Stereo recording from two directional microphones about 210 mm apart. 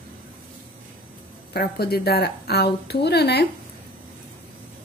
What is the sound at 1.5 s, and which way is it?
A woman's voice, 50° left (ahead or behind).